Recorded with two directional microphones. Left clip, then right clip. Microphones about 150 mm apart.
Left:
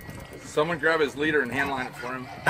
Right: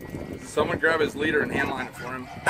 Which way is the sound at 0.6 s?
90° right.